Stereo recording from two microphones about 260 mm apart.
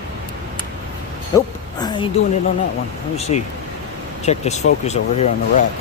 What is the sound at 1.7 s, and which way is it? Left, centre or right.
Speech, centre.